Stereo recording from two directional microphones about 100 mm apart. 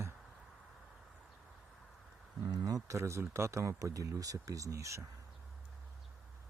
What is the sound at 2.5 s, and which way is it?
Speech, 35° right (ahead or behind).